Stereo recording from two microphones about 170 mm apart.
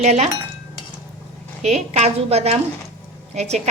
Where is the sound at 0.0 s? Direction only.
40° right (ahead or behind).